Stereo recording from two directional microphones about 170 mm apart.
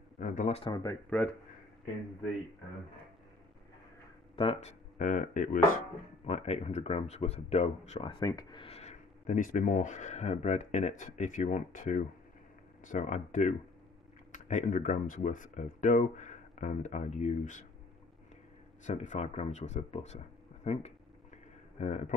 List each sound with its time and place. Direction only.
0.2 s speech: 50° left (ahead or behind)
0.6 s speech: 25° left (ahead or behind)
4.4 s speech: 30° left (ahead or behind)
4.9 s speech: 50° left (ahead or behind)
6.2 s speech: 35° left (ahead or behind)
8.1 s speech: 20° left (ahead or behind); by 17.6 s 45° left (ahead or behind)
18.9 s speech: 45° left (ahead or behind)